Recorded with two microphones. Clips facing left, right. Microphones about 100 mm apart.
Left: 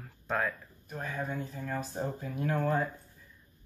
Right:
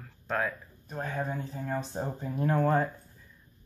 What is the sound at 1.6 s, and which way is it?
Speech, 25° right (ahead or behind).